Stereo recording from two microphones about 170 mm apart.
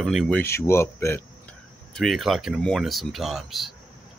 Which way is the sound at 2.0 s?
Centre (ahead or behind).